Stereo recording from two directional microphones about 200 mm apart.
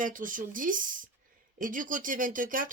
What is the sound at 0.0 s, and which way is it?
Speech, 40° right (ahead or behind).